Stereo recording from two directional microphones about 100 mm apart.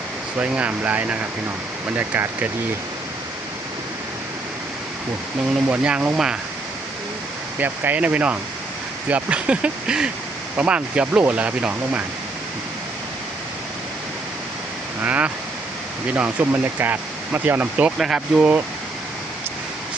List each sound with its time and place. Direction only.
0.3 s speech: 15° right (ahead or behind)
5.6 s speech: 15° right (ahead or behind)
7.6 s speech: 15° right (ahead or behind)
15.0 s speech: 15° right (ahead or behind)